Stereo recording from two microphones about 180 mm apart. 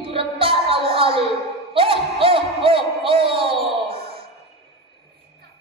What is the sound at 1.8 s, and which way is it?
Music, 30° right (ahead or behind).